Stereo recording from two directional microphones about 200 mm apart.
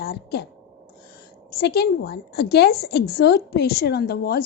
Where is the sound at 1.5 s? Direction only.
50° left (ahead or behind).